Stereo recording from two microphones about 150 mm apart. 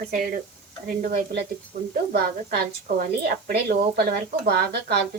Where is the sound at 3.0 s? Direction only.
80° right.